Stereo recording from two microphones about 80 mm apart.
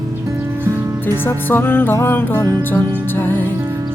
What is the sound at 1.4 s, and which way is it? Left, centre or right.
Music, left.